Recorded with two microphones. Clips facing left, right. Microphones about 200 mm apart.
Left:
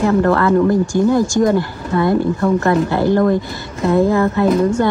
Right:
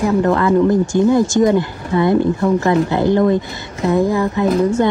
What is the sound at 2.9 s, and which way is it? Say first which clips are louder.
Speech: even; 20° right (ahead or behind).